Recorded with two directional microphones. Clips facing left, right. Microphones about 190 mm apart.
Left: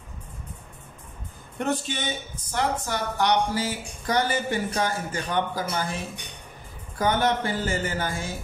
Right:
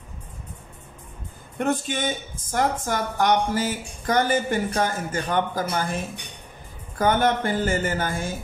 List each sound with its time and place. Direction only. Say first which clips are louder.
1.6 s speech: right 3 dB; 50° right (ahead or behind)
7.0 s speech: right 3 dB; 50° right (ahead or behind)